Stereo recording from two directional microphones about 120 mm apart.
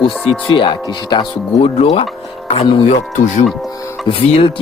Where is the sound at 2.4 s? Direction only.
45° left (ahead or behind).